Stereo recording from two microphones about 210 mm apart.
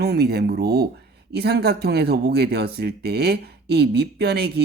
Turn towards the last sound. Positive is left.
turn(degrees=-50)  # may be behind; listen again after turning